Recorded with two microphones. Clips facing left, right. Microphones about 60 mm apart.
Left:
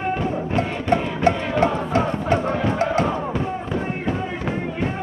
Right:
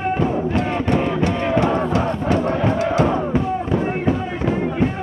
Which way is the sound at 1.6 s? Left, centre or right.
Left.